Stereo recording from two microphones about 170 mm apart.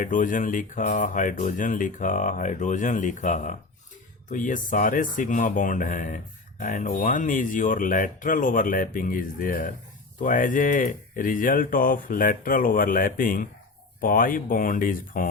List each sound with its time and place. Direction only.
0.0 s speech: 50° left (ahead or behind)